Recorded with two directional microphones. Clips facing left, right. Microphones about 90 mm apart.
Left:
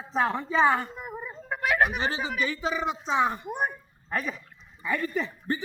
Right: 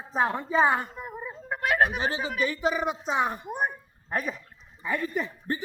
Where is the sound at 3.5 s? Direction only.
Centre (ahead or behind).